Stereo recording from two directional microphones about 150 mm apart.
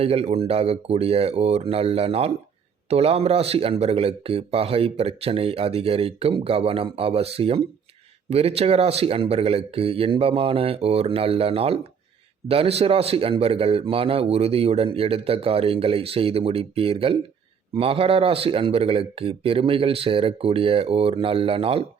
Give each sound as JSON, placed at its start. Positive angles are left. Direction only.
{"t": 0.0, "sound": "a man's voice", "side_deg": -40}